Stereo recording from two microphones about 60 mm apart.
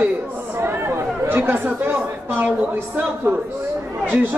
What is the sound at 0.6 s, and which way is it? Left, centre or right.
A man's voice, right.